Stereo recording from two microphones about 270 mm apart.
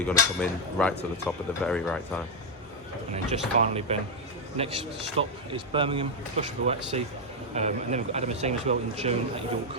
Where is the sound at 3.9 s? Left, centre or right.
Right.